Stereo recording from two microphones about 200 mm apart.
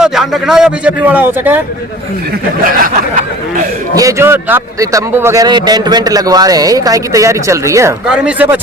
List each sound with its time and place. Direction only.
0.0 s a man's voice: centre (ahead or behind)
2.8 s speech: 45° right (ahead or behind)
3.9 s a man's voice: 15° right (ahead or behind)
8.0 s a man's voice: 5° right (ahead or behind)